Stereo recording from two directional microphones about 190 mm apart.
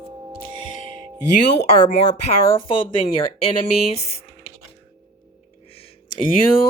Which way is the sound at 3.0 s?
30° left (ahead or behind).